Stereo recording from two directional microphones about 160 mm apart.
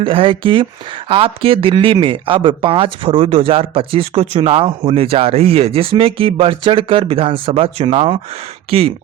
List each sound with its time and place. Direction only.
0.0 s speech: 35° right (ahead or behind)